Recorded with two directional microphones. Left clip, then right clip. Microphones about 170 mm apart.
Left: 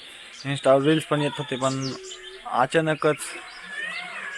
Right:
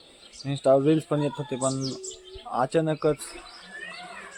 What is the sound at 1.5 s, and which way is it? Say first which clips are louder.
Speech: left 2 dB; 15° left (ahead or behind).